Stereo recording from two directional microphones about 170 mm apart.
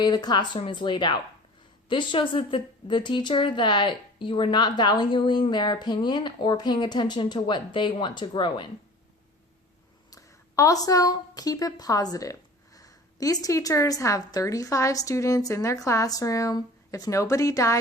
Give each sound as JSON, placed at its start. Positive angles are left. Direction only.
{"t": 0.0, "sound": "speech", "side_deg": 25}
{"t": 10.1, "sound": "a woman's voice", "side_deg": 20}